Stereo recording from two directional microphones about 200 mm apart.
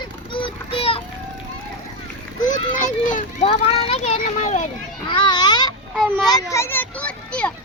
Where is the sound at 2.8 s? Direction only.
40° left (ahead or behind).